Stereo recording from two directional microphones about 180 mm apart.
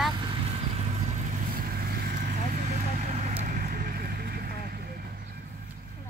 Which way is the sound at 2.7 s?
35° right (ahead or behind).